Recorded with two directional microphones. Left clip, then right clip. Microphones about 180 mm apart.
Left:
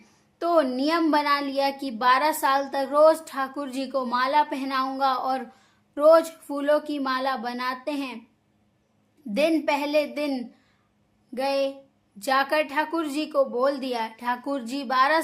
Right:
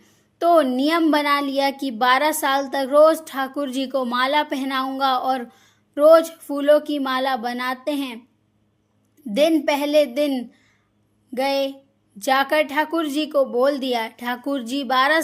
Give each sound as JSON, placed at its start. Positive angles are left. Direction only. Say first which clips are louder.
{"t": 0.0, "sound": "speech", "louder": "right 8 dB", "side_deg": -20}
{"t": 9.3, "sound": "speech", "louder": "right 5 dB", "side_deg": -20}